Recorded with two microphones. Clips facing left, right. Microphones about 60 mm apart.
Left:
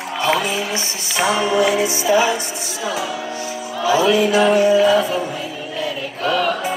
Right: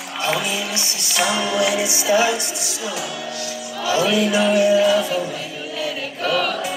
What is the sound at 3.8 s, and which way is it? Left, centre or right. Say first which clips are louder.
Music: left 4 dB; centre.